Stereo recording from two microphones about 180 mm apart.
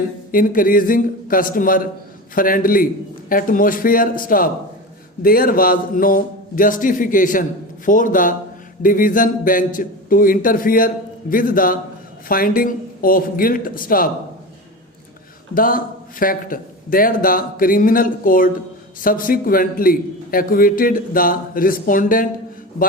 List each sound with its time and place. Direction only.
0.3 s a man's voice: 50° left (ahead or behind)
15.5 s a man's voice: 50° left (ahead or behind)